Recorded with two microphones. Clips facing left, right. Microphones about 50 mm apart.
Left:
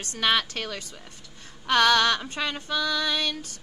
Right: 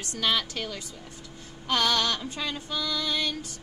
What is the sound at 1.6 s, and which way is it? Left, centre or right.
Female singing, left.